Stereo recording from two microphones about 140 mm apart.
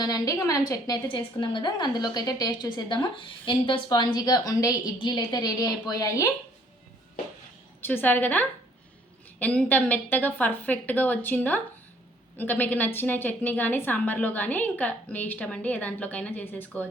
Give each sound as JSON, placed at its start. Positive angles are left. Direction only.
{"t": 0.0, "sound": "a woman's voice", "side_deg": 25}
{"t": 1.0, "sound": "a woman's voice", "side_deg": 35}
{"t": 7.8, "sound": "a woman's voice", "side_deg": 15}